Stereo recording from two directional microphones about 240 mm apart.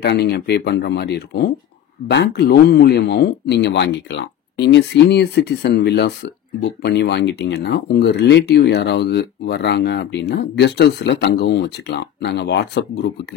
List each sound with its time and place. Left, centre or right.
0.0 s speech: left